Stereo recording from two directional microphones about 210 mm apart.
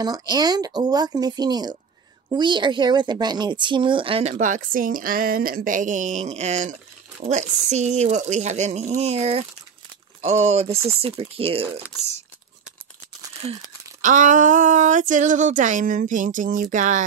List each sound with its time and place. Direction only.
0.0 s a woman's voice: 20° right (ahead or behind)
13.4 s a woman's voice: 30° right (ahead or behind)